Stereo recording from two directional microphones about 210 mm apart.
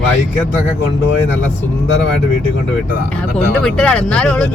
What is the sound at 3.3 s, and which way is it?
Speech, 5° left (ahead or behind).